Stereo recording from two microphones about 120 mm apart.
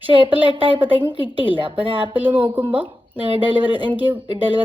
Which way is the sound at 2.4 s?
15° right (ahead or behind).